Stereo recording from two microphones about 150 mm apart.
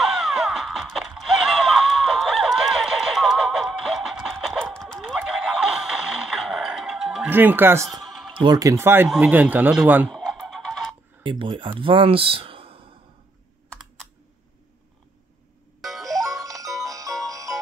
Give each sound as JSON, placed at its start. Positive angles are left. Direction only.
{"t": 0.0, "sound": "music", "side_deg": -5}
{"t": 7.2, "sound": "speech", "side_deg": -15}
{"t": 7.9, "sound": "music", "side_deg": 0}
{"t": 8.4, "sound": "speech", "side_deg": -25}
{"t": 11.2, "sound": "speech", "side_deg": -35}
{"t": 15.8, "sound": "music", "side_deg": 0}
{"t": 16.4, "sound": "music", "side_deg": -20}